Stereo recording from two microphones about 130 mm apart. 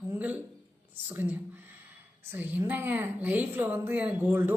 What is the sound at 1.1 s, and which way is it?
A woman's voice, 15° right (ahead or behind).